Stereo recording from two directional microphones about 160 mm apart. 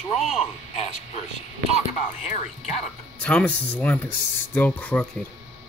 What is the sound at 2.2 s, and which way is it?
Speech, 45° left (ahead or behind).